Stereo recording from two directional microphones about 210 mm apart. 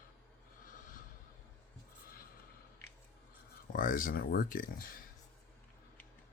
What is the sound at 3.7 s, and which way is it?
Speech, 40° left (ahead or behind).